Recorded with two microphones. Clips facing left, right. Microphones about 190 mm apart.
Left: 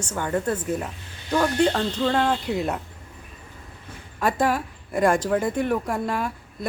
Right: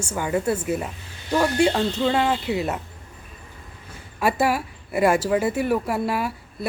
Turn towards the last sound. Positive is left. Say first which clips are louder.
# right 2 dB
turn(degrees=-5)  # may be behind; listen again after turning